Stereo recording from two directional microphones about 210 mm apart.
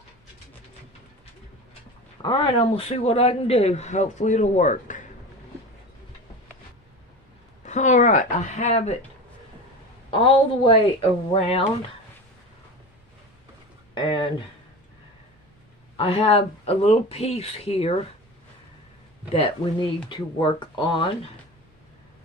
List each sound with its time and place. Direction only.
2.2 s speech: 25° left (ahead or behind)
7.6 s speech: 35° left (ahead or behind)
10.1 s speech: 25° left (ahead or behind)
13.9 s a sound: 25° left (ahead or behind)
16.0 s speech: 25° left (ahead or behind)
19.3 s speech: 25° left (ahead or behind)